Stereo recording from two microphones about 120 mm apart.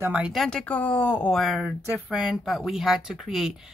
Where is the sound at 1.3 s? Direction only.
Centre (ahead or behind).